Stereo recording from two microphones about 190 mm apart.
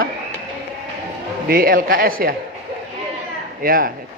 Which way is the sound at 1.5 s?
50° right (ahead or behind).